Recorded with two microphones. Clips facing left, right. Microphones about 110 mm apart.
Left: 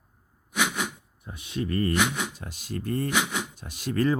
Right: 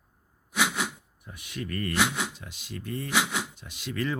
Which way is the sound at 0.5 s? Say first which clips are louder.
Even; 10° right (ahead or behind).